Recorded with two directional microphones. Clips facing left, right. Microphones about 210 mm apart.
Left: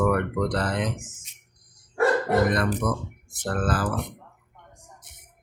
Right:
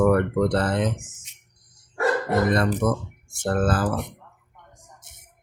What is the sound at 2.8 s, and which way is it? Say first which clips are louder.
Speech: right 4 dB; 25° right (ahead or behind).